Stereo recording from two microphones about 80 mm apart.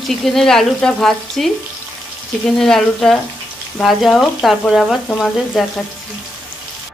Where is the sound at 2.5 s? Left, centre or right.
Centre.